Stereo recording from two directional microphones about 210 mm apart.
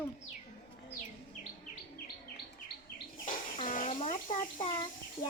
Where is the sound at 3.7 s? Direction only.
40° left (ahead or behind).